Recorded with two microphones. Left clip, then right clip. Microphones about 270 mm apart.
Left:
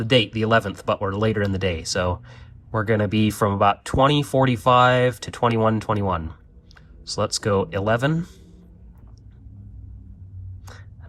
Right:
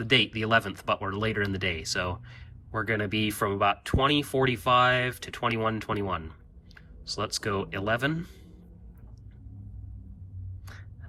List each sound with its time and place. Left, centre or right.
0.0 s speech: centre